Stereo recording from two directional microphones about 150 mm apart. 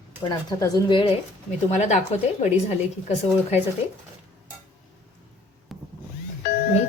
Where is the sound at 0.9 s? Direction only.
35° left (ahead or behind).